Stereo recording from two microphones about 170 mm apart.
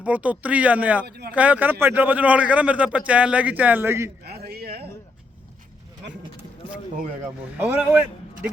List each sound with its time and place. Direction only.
0.0 s a man's voice: 10° right (ahead or behind)
1.0 s a man's voice: 70° right (ahead or behind)
1.3 s a man's voice: 10° right (ahead or behind)
4.2 s a sound: 70° right (ahead or behind)
7.6 s a man's voice: 10° right (ahead or behind)